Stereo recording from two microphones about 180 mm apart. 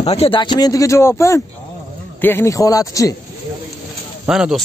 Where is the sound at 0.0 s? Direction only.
35° left (ahead or behind); by 3.2 s 20° left (ahead or behind).